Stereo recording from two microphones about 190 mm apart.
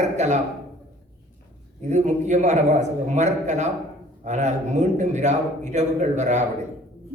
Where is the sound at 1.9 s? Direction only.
40° right (ahead or behind).